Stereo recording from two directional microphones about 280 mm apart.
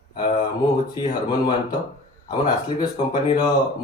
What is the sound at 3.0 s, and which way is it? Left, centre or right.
Speech, centre.